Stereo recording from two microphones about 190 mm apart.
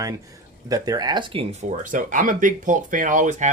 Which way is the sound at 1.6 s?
45° right (ahead or behind).